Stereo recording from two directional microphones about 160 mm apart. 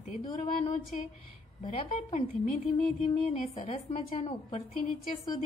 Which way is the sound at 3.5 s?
40° left (ahead or behind).